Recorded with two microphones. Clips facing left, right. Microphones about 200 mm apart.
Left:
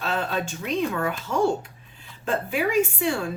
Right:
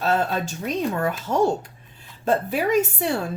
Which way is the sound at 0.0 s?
40° right (ahead or behind).